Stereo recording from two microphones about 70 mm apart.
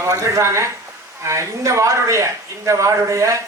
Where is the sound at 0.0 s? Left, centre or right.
Right.